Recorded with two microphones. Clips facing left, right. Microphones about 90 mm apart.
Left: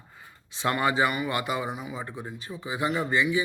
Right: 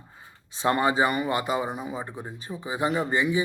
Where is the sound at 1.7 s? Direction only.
40° right (ahead or behind).